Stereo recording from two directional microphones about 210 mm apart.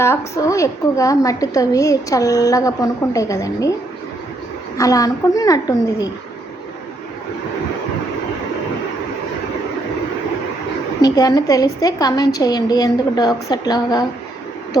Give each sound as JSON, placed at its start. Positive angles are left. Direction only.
{"t": 0.0, "sound": "a woman's voice", "side_deg": 15}
{"t": 4.8, "sound": "a woman's voice", "side_deg": 15}
{"t": 11.0, "sound": "a woman's voice", "side_deg": 15}